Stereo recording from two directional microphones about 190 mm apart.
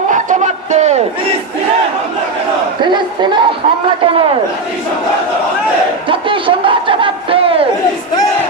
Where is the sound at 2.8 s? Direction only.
25° right (ahead or behind).